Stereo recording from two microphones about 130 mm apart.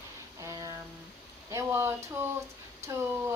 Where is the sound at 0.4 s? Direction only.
25° right (ahead or behind).